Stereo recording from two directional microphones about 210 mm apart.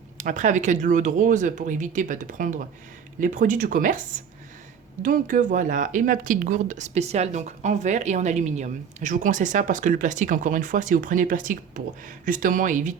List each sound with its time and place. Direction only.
0.2 s a woman's voice: 35° right (ahead or behind)
5.0 s a woman's voice: 40° right (ahead or behind)